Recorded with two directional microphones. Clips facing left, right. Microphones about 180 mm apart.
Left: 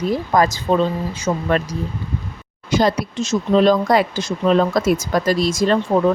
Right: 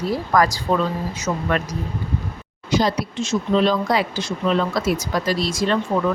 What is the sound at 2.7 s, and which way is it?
Speech, 50° left (ahead or behind).